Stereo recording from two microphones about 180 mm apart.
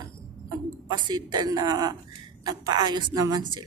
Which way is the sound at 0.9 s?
25° right (ahead or behind).